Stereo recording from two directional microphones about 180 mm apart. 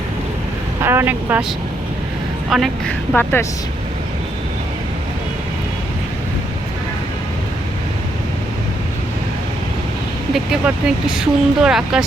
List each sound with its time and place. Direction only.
0.8 s speech: 15° right (ahead or behind)
2.5 s speech: centre (ahead or behind)
10.3 s speech: 5° right (ahead or behind)